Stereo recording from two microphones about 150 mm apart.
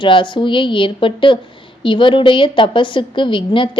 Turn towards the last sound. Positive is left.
turn(degrees=35)  # may be behind; listen again after turning